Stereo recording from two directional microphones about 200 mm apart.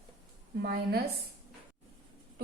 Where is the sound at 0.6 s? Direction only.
50° right (ahead or behind).